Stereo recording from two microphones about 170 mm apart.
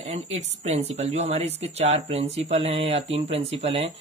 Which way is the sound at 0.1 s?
40° right (ahead or behind).